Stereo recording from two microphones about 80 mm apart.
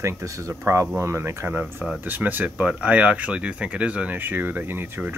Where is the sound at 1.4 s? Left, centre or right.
Right.